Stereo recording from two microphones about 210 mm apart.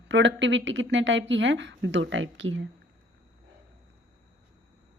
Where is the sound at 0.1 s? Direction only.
60° right (ahead or behind).